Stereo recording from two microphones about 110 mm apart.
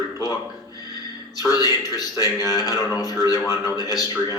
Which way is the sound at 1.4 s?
35° left (ahead or behind).